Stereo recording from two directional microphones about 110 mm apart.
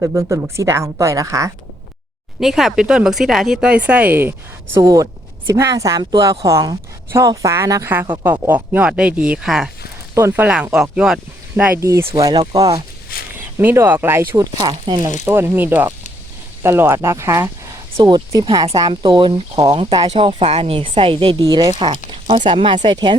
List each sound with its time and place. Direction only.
0.0 s a woman's voice: 25° right (ahead or behind)
2.4 s a woman's voice: centre (ahead or behind)
10.2 s speech: 20° right (ahead or behind)
11.8 s speech: 30° right (ahead or behind)
13.6 s a woman's voice: 20° right (ahead or behind)
14.3 s speech: 35° right (ahead or behind)
15.2 s a woman's voice: 20° right (ahead or behind)
18.9 s speech: 45° right (ahead or behind)
20.1 s speech: 65° right (ahead or behind); by 23.1 s 45° right (ahead or behind)